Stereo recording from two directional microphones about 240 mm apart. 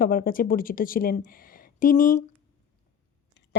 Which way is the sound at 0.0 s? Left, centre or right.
Left.